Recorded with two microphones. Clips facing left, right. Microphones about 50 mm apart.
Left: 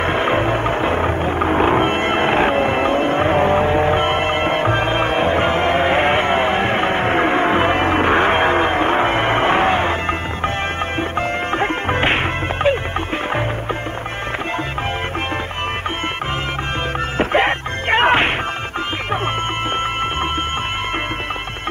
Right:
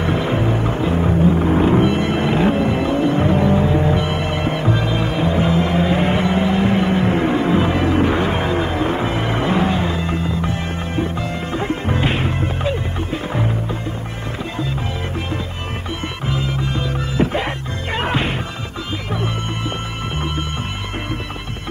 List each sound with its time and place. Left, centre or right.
0.0 s music: left
17.2 s music: left